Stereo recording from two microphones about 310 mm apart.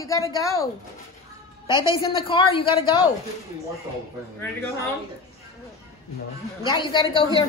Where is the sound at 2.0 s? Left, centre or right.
Centre.